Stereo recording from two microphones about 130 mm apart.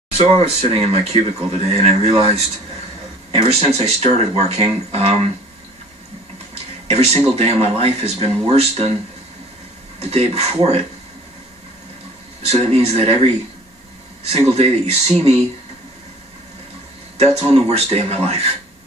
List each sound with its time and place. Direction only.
0.3 s speech: 50° right (ahead or behind)
3.3 s speech: 55° right (ahead or behind)
6.9 s speech: 50° right (ahead or behind)
9.9 s speech: 50° right (ahead or behind)
12.4 s speech: 55° right (ahead or behind)
14.3 s speech: 55° right (ahead or behind)
17.2 s speech: 50° right (ahead or behind)